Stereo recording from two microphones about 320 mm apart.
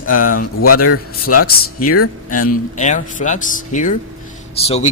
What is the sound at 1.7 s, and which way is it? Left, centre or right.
Speech, left.